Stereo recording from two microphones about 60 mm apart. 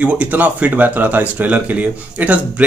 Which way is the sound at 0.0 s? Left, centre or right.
Right.